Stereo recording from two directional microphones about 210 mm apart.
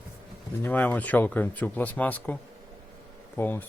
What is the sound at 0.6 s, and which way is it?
Speech, 10° left (ahead or behind).